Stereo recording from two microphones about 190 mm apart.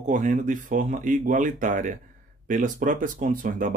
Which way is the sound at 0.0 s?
40° right (ahead or behind).